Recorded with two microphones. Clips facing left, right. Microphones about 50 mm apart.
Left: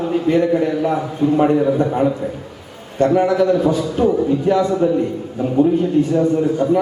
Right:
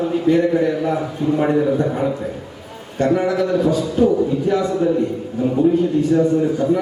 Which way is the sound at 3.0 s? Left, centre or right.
Left.